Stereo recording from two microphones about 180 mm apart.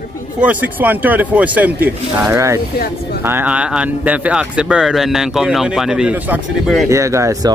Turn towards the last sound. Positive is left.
turn(degrees=-15)  # may be behind; listen again after turning